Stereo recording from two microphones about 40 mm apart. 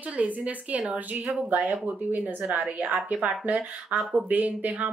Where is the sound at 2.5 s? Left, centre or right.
Right.